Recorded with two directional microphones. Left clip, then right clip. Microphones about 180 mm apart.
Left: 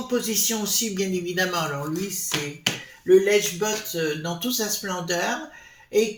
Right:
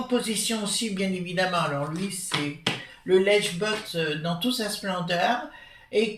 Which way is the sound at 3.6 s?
45° left (ahead or behind).